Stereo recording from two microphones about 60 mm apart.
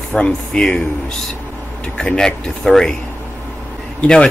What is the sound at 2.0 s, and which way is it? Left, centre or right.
Speech, centre.